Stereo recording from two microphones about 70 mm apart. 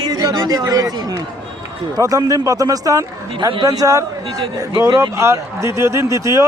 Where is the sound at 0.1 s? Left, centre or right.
Right.